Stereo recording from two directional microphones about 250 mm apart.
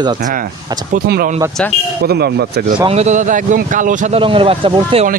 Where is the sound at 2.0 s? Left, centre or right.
Right.